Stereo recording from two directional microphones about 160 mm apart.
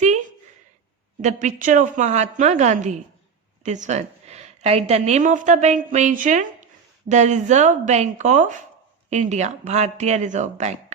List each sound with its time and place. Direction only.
1.2 s a woman's voice: 50° right (ahead or behind)